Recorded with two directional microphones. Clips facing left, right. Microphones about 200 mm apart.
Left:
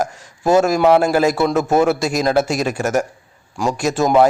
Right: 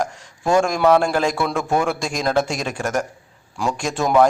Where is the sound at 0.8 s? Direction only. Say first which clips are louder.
Left 2 dB; 20° left (ahead or behind).